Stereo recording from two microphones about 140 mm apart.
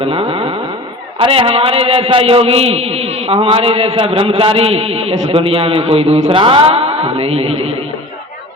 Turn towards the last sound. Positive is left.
turn(degrees=-40)  # may be behind; listen again after turning